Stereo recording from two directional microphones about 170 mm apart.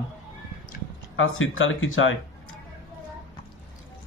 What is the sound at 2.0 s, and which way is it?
Speech, 90° left.